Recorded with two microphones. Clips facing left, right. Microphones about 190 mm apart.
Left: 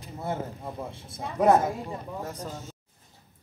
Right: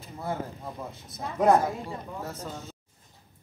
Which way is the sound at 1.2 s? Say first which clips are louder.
Left 1 dB; 10° left (ahead or behind).